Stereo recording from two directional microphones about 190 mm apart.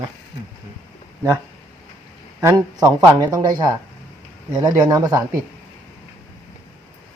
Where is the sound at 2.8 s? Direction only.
10° right (ahead or behind).